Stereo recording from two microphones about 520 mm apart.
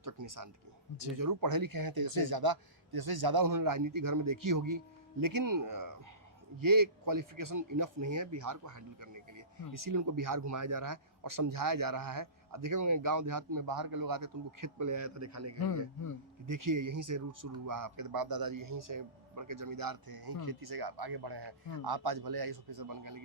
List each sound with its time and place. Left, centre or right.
0.0 s a man's voice: right